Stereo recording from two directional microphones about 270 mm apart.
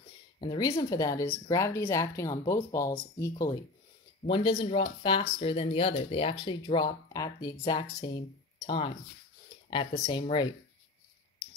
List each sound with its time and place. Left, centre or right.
0.4 s speech: centre